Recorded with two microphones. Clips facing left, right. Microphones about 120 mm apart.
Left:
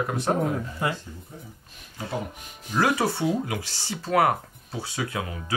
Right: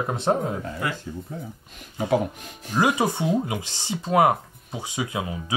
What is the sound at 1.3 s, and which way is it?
Speech, 85° right.